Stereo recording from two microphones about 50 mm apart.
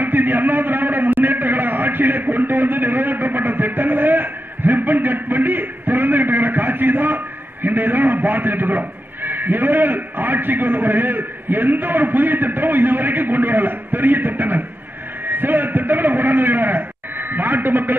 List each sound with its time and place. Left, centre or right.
0.0 s a man's voice: right